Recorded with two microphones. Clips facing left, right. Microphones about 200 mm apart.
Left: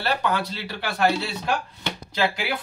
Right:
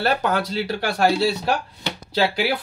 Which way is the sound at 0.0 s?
45° right (ahead or behind).